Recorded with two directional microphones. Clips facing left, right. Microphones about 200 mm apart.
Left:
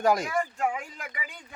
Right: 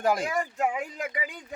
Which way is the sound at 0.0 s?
Centre (ahead or behind).